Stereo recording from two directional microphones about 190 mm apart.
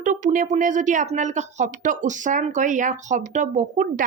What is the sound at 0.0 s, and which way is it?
Speech, 40° right (ahead or behind).